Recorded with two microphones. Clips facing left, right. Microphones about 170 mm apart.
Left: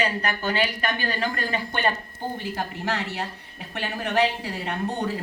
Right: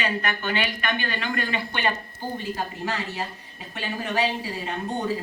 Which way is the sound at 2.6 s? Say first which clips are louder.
Left 1 dB; 70° left (ahead or behind).